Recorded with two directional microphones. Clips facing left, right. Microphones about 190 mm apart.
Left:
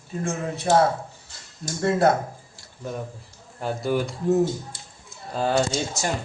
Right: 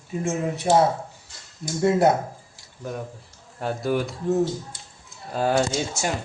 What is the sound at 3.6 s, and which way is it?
Speech, centre (ahead or behind).